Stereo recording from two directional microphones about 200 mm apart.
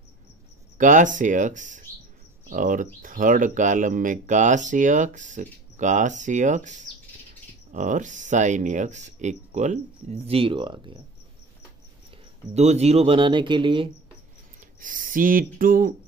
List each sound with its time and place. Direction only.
0.7 s speech: 40° right (ahead or behind); by 11.0 s 25° right (ahead or behind)
12.5 s speech: 35° right (ahead or behind)
14.8 s speech: 40° right (ahead or behind)